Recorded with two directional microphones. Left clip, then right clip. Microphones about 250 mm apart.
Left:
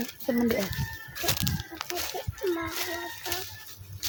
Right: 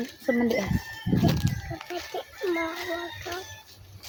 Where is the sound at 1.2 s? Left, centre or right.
Left.